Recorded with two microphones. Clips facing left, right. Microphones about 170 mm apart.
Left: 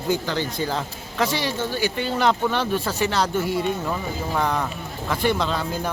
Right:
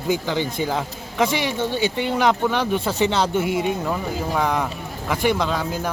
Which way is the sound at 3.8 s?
5° right (ahead or behind).